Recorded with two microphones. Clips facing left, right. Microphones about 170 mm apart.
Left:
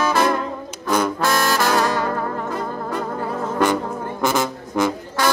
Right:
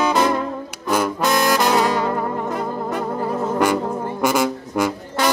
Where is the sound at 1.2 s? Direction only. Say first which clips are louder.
Right 5 dB; 15° right (ahead or behind).